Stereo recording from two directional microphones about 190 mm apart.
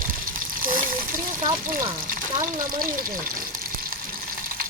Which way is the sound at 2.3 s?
45° right (ahead or behind).